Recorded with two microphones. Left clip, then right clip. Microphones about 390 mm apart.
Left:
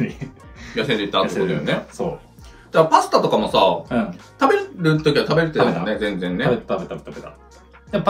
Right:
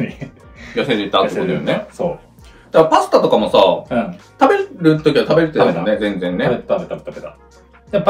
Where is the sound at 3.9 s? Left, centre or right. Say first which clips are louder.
Right 4 dB; centre.